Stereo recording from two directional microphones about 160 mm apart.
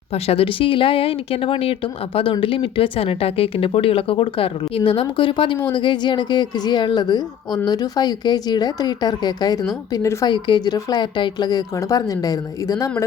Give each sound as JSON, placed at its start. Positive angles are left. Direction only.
{"t": 0.1, "sound": "a woman's voice", "side_deg": 35}